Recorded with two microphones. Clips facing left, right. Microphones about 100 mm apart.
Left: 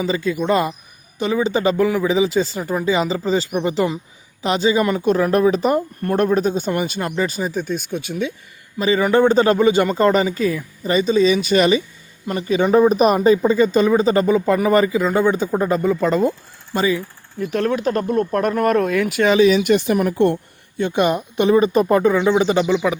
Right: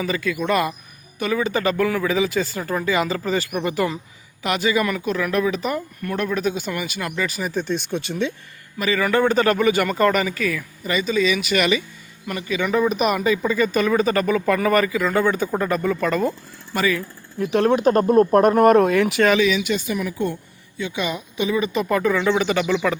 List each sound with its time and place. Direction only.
0.0 s speech: 25° left (ahead or behind)
7.5 s speech: 10° left (ahead or behind)
8.8 s speech: 25° left (ahead or behind)
17.3 s speech: centre (ahead or behind)
17.8 s speech: 35° right (ahead or behind)
18.8 s speech: centre (ahead or behind)
19.4 s speech: 40° left (ahead or behind); by 20.3 s 60° left (ahead or behind)
20.7 s speech: 50° left (ahead or behind)
21.9 s speech: 25° left (ahead or behind)